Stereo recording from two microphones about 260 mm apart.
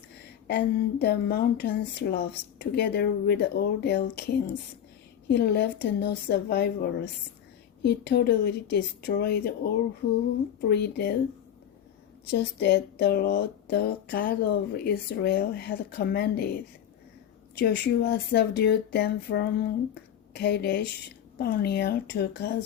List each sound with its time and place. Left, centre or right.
0.4 s speech: left
12.3 s speech: left